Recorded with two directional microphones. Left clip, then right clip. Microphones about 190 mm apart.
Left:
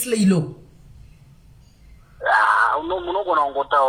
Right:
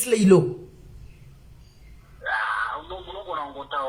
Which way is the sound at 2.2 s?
45° left (ahead or behind).